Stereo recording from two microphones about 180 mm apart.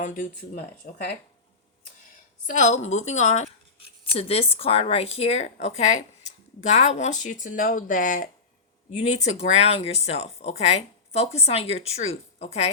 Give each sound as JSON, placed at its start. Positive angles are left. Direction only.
{"t": 0.0, "sound": "speech", "side_deg": 45}
{"t": 2.5, "sound": "a woman's voice", "side_deg": 40}